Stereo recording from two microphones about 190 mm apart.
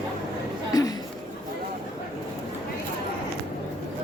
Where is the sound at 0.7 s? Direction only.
20° left (ahead or behind).